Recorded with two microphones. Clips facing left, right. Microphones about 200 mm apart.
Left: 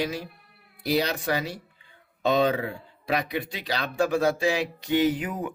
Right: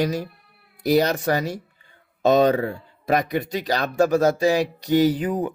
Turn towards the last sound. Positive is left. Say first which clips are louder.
# right 5 dB
turn(degrees=-35)  # may be behind; listen again after turning